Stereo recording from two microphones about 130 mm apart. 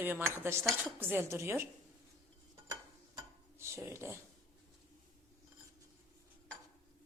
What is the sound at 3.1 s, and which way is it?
Dishes, 25° right (ahead or behind).